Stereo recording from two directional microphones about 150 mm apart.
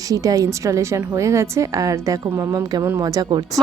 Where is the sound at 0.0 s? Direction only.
25° right (ahead or behind).